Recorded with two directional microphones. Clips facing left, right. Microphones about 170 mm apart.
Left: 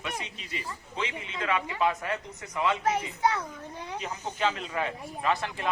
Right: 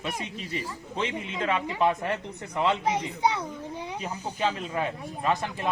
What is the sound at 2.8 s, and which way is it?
Speech, 15° right (ahead or behind).